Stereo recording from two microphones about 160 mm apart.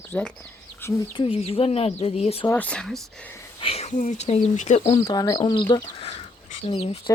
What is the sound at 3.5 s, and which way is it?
Speech, 35° left (ahead or behind).